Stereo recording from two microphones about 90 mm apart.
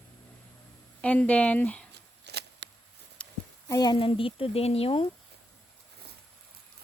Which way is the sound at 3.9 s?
75° left (ahead or behind).